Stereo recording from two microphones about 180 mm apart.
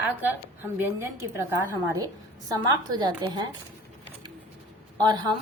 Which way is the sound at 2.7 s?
25° right (ahead or behind).